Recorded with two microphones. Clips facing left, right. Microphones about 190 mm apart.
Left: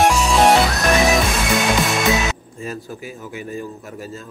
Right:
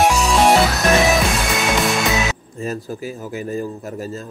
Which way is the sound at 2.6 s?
40° right (ahead or behind).